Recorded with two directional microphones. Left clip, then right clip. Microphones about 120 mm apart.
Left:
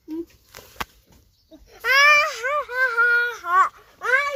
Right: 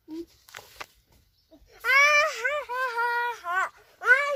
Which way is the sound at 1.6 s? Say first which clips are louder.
Left 4 dB; 40° left (ahead or behind).